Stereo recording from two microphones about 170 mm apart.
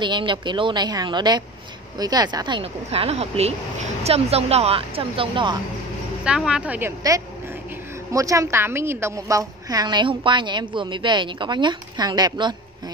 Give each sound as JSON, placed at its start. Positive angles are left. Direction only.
{"t": 0.0, "sound": "a woman's voice", "side_deg": -30}
{"t": 6.2, "sound": "a woman's voice", "side_deg": -5}
{"t": 7.0, "sound": "a woman's voice", "side_deg": -20}